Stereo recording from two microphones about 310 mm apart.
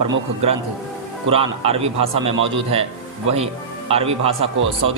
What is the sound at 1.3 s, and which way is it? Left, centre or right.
Speech, centre.